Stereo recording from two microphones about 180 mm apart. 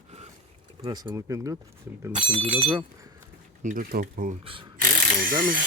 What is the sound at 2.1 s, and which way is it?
Speech, 30° right (ahead or behind).